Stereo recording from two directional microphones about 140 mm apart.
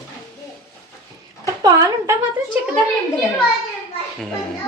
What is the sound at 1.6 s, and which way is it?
Speech, 25° right (ahead or behind).